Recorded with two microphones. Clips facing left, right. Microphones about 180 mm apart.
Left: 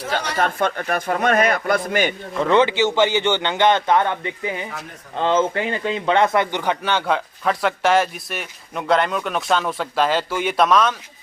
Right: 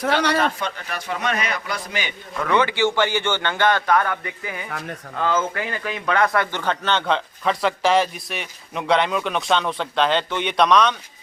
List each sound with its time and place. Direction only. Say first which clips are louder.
0.3 s speech: left 2 dB; 50° left (ahead or behind)
2.4 s speech: left 3 dB; 20° left (ahead or behind); by 10.9 s 5° left (ahead or behind)